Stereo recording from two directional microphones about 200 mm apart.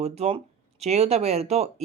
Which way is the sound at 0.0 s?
30° right (ahead or behind).